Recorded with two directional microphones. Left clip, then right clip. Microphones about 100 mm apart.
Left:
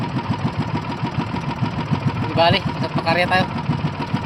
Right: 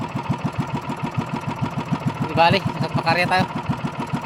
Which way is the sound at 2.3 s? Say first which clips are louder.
Even; 30° right (ahead or behind).